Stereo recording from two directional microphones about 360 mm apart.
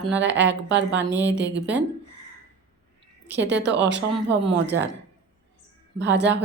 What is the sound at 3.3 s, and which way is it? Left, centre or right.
Speech, right.